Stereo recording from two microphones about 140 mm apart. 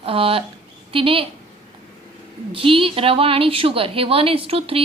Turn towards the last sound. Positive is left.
turn(degrees=-45)  # may be behind; listen again after turning